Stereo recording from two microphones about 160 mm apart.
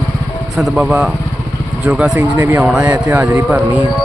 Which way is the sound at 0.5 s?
5° right (ahead or behind).